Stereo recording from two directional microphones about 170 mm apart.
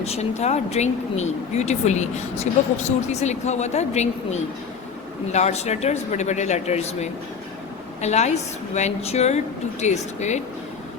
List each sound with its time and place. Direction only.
0.0 s a woman's voice: 40° left (ahead or behind)